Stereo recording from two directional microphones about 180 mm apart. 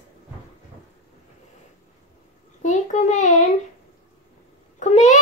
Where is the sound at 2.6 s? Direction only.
40° left (ahead or behind).